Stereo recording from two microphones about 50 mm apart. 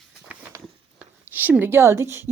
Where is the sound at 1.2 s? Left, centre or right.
Right.